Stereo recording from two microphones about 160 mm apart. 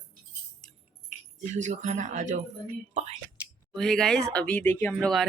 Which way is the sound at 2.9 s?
45° right (ahead or behind).